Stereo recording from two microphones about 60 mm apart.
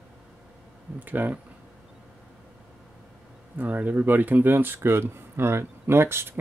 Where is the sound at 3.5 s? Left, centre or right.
Right.